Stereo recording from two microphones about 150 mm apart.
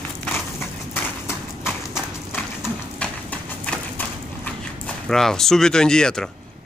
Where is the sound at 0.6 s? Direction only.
10° left (ahead or behind).